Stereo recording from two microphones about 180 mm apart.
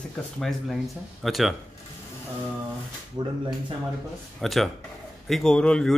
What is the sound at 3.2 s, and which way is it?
Speech, 20° right (ahead or behind).